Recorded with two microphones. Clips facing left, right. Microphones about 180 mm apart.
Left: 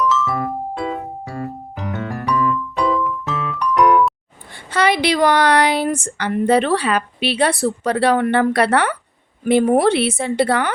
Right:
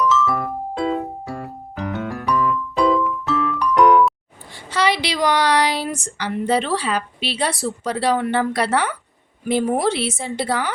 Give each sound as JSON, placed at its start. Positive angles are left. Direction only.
{"t": 0.0, "sound": "music", "side_deg": 0}
{"t": 4.5, "sound": "a woman's voice", "side_deg": 55}